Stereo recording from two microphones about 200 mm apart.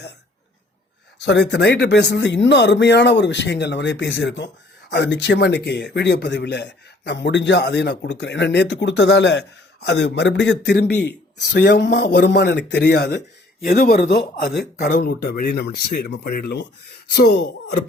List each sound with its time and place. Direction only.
1.2 s speech: 60° left (ahead or behind)